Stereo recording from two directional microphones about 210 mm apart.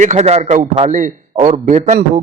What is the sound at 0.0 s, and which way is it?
A man's voice, 30° right (ahead or behind).